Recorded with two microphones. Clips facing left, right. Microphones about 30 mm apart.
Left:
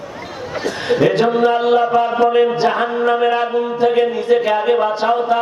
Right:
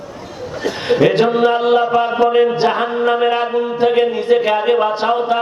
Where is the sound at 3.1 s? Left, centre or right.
Right.